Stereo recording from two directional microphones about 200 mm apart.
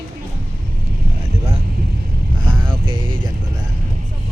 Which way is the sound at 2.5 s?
25° right (ahead or behind).